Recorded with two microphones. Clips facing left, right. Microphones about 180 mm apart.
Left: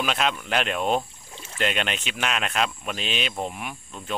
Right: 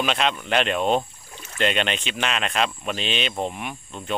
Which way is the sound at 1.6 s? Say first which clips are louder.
Right 3 dB; 5° left (ahead or behind).